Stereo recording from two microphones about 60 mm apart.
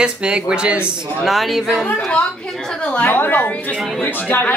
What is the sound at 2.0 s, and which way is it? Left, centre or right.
Speech, centre.